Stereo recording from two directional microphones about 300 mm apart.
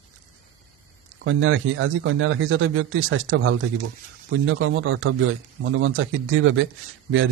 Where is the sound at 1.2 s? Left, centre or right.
Right.